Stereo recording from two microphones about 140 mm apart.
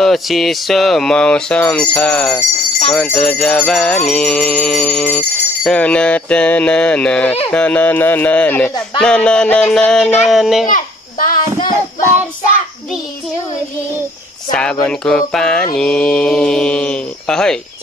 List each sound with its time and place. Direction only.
0.0 s speech: centre (ahead or behind)
10.7 s babbling: 70° left (ahead or behind)
14.5 s speech: 5° left (ahead or behind)